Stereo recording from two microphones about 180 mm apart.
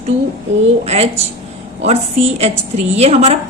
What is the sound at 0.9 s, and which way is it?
A woman's voice, 35° right (ahead or behind).